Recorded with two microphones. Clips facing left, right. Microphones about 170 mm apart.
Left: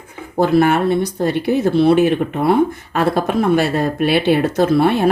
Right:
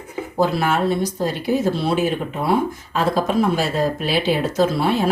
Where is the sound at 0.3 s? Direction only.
60° left (ahead or behind).